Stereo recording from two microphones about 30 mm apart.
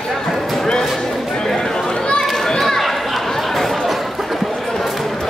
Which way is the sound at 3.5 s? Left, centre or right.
Centre.